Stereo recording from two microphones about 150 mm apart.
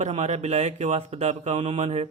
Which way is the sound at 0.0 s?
45° right (ahead or behind).